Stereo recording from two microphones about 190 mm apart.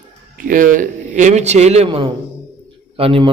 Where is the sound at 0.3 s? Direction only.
45° right (ahead or behind).